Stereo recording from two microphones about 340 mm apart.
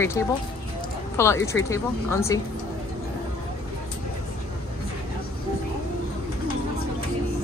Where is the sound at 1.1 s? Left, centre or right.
Centre.